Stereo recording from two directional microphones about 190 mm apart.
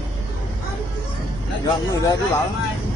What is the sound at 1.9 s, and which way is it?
Speech, 20° left (ahead or behind).